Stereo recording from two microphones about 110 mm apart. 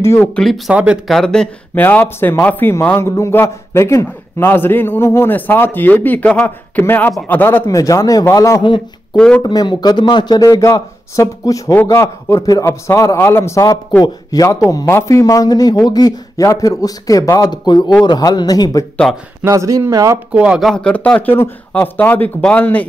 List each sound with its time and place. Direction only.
0.0 s a man's voice: 25° left (ahead or behind)
0.4 s speech: centre (ahead or behind)
1.8 s a man's voice: 15° left (ahead or behind)
7.6 s a man's voice: 30° left (ahead or behind)
9.1 s speech: 10° left (ahead or behind)
9.4 s a man's voice: 40° left (ahead or behind)
19.4 s speech: 30° right (ahead or behind)
20.3 s speech: 10° right (ahead or behind)
20.6 s speech: 10° left (ahead or behind)